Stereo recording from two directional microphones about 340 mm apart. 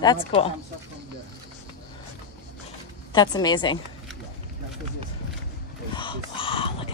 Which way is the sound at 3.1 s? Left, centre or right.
Centre.